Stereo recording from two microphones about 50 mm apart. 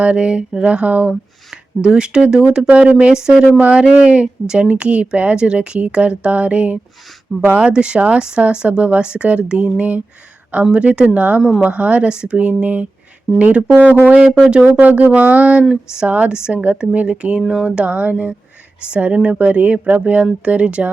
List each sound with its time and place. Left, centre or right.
0.0 s a woman's voice: right
1.8 s a woman's voice: centre
3.1 s speech: centre
3.6 s a woman's voice: right
13.7 s speech: right
15.7 s speech: centre
16.0 s speech: right
16.3 s a woman's voice: centre